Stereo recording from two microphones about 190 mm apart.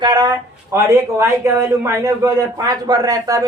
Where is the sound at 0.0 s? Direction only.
20° right (ahead or behind).